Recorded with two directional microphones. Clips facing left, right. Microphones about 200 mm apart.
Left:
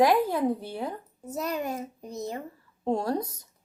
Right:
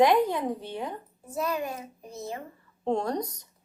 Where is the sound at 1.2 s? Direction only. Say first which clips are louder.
Even; 40° left (ahead or behind).